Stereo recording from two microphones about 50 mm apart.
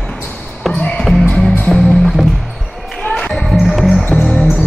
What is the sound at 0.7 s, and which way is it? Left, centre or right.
Music, left.